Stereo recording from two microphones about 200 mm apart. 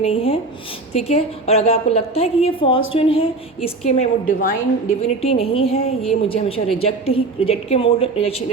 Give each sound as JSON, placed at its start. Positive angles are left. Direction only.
{"t": 0.0, "sound": "a woman's voice", "side_deg": 30}